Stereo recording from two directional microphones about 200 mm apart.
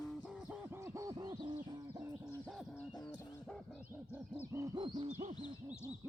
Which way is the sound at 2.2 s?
15° right (ahead or behind).